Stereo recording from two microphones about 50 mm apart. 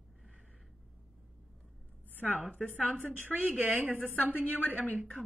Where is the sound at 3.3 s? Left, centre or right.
Right.